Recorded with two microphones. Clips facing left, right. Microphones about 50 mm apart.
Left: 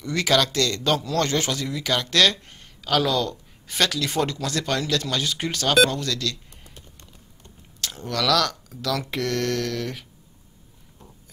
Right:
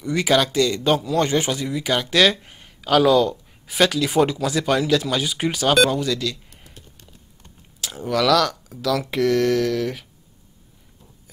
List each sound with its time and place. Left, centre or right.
0.0 s a man's voice: centre
7.8 s speech: centre